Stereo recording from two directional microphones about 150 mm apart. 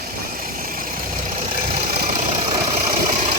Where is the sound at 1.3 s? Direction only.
55° right (ahead or behind).